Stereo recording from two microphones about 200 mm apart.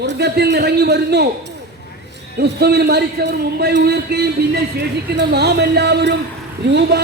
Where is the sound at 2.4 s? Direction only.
55° right (ahead or behind).